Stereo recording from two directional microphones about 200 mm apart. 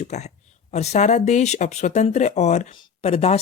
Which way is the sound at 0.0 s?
35° left (ahead or behind).